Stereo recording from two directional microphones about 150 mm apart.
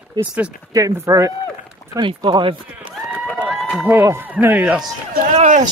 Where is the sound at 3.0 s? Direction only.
Centre (ahead or behind).